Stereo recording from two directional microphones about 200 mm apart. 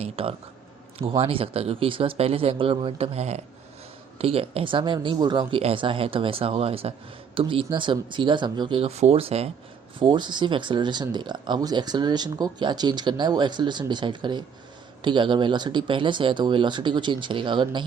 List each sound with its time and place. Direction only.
0.0 s speech: 30° right (ahead or behind)